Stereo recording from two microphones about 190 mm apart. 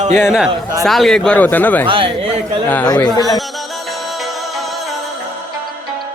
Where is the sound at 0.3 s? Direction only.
5° right (ahead or behind).